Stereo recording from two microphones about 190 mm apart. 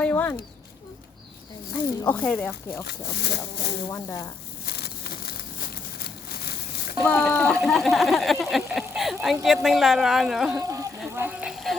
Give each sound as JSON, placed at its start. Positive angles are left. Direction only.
{"t": 0.0, "sound": "speech", "side_deg": 10}
{"t": 1.7, "sound": "speech", "side_deg": 10}
{"t": 2.8, "sound": "speech", "side_deg": 60}
{"t": 3.8, "sound": "speech", "side_deg": 15}
{"t": 4.6, "sound": "a sound", "side_deg": 55}
{"t": 7.0, "sound": "speech", "side_deg": 10}
{"t": 10.6, "sound": "speech", "side_deg": -20}